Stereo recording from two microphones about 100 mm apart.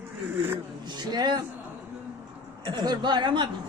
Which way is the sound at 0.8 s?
45° right (ahead or behind).